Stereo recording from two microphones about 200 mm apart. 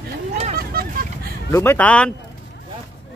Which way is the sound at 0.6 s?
50° right (ahead or behind).